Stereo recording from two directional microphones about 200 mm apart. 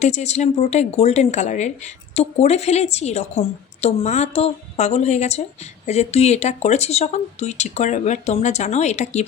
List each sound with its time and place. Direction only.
0.0 s speech: 35° left (ahead or behind)